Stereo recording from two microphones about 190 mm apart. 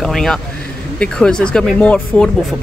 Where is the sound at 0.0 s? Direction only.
Centre (ahead or behind).